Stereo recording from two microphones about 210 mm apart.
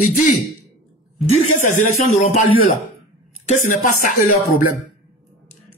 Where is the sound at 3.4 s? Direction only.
35° left (ahead or behind).